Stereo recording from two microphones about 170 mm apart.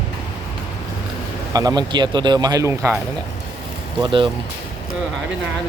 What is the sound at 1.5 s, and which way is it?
Speech, 25° right (ahead or behind).